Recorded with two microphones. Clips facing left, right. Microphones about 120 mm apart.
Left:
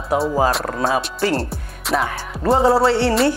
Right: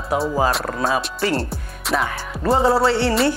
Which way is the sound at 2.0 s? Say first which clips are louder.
Left 1 dB; 30° left (ahead or behind).